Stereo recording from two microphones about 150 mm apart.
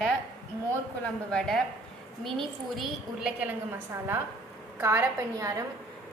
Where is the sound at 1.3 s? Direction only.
5° left (ahead or behind); by 5.6 s 20° right (ahead or behind).